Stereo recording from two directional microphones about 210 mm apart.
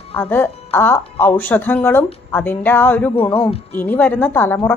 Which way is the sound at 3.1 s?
30° left (ahead or behind).